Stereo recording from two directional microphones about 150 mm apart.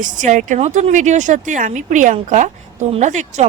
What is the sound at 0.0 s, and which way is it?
Speech, 60° right (ahead or behind).